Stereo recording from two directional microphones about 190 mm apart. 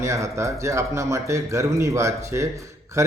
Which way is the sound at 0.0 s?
15° right (ahead or behind).